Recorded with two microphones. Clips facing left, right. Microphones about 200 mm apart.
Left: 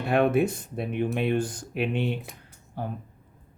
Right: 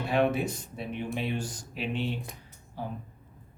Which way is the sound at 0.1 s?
55° left (ahead or behind).